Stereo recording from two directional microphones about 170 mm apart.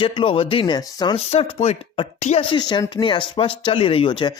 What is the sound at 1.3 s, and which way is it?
A man's voice, 40° left (ahead or behind).